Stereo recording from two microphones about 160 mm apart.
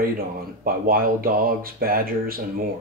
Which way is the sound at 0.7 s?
65° right (ahead or behind).